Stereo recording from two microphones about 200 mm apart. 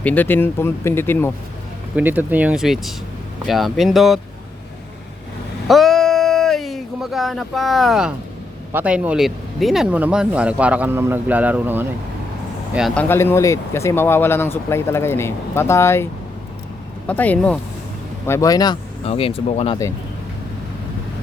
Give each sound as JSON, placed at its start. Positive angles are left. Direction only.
{"t": 0.0, "sound": "speech", "side_deg": 10}
{"t": 2.0, "sound": "speech", "side_deg": -10}
{"t": 5.6, "sound": "a sound", "side_deg": 0}
{"t": 8.7, "sound": "speech", "side_deg": -5}
{"t": 12.7, "sound": "speech", "side_deg": 0}
{"t": 17.1, "sound": "speech", "side_deg": 5}